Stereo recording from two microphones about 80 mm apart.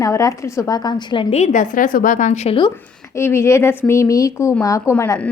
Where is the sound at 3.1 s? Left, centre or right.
Left.